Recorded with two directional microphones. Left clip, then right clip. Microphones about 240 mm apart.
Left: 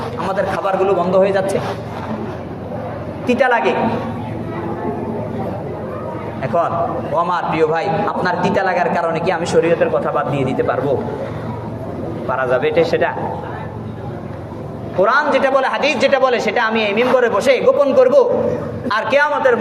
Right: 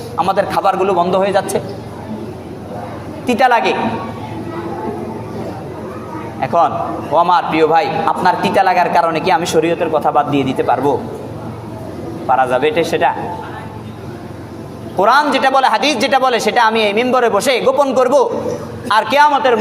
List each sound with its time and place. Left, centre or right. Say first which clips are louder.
0.3 s a man's voice: right 3 dB; right
3.2 s a man's voice: right 2 dB; right
6.4 s a man's voice: right 3 dB; right
12.3 s a man's voice: right 3 dB; right
15.0 s a man's voice: right 3 dB; right